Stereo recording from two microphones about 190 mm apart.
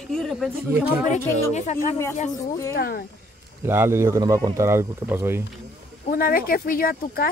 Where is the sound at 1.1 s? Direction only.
35° left (ahead or behind).